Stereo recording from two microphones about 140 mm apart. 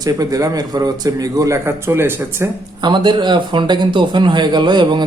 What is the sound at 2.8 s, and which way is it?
Speech, 35° right (ahead or behind).